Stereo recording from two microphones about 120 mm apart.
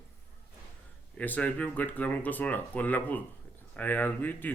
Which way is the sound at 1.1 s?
10° left (ahead or behind).